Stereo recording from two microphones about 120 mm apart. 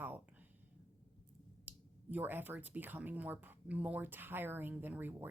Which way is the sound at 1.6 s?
15° right (ahead or behind).